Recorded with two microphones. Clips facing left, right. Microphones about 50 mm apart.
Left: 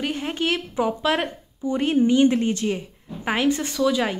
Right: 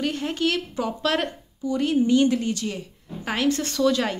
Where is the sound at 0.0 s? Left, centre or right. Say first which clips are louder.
Right 1 dB; centre.